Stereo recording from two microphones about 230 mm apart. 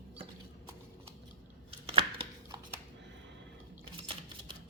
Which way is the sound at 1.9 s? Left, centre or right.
Right.